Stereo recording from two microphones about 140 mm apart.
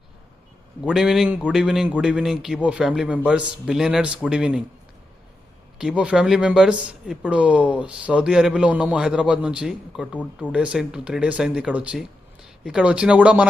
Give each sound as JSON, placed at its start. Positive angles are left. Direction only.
{"t": 0.7, "sound": "speech", "side_deg": -5}
{"t": 5.8, "sound": "speech", "side_deg": -5}